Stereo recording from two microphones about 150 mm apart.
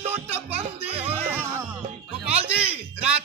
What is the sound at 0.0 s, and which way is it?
Music, 40° right (ahead or behind).